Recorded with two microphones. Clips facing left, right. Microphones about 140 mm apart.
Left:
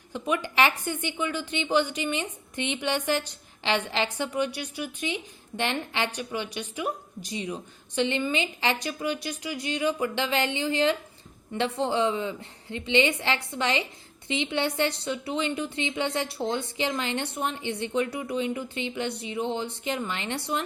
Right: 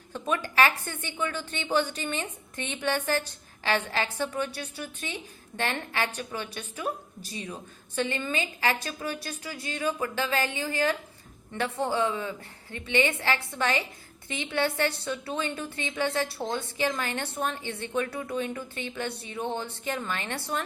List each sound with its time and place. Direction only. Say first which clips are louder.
0.1 s a woman's voice: left 2 dB; 15° left (ahead or behind)